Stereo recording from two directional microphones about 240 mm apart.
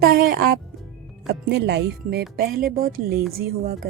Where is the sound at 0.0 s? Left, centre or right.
Right.